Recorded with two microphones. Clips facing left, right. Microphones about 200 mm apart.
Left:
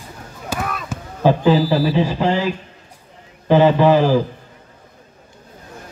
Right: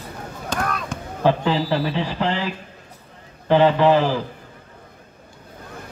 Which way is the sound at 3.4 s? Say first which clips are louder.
Left 3 dB; 10° left (ahead or behind).